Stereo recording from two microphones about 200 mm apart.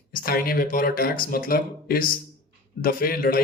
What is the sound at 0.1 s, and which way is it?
Speech, 45° left (ahead or behind).